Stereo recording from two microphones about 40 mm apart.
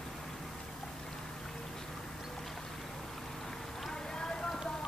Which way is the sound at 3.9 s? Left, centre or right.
Centre.